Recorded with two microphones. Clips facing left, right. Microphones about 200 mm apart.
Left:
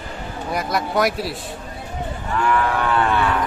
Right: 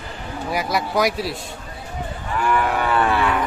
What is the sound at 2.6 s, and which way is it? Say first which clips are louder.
Livestock: even; 10° right (ahead or behind).